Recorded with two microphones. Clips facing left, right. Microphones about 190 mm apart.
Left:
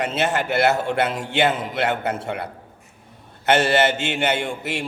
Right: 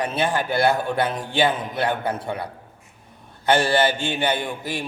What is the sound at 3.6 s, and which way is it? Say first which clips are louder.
A man's voice: left 1 dB; 70° left (ahead or behind).